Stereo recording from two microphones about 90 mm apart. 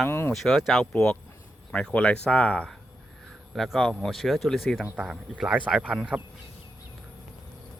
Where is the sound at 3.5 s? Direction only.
Centre (ahead or behind).